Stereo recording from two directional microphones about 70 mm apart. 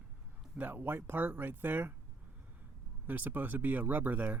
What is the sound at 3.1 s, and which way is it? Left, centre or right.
Speech, right.